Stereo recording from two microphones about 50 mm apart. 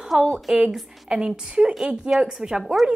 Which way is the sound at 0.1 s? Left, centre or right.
Centre.